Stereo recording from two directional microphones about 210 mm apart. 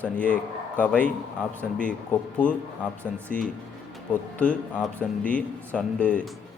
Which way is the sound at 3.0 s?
5° left (ahead or behind).